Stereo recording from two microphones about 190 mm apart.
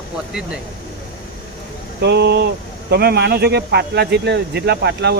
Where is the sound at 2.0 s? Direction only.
60° right (ahead or behind).